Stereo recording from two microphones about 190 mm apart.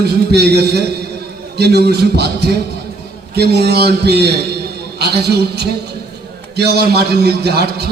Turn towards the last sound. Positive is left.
turn(degrees=-60)  # may be behind; listen again after turning